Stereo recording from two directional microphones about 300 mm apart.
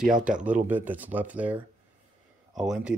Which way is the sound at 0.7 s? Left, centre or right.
Centre.